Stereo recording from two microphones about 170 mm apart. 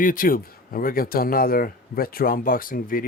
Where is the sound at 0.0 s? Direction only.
55° left (ahead or behind).